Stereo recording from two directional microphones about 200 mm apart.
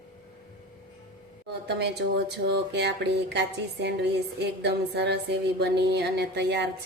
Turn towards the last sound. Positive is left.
turn(degrees=-60)  # may be behind; listen again after turning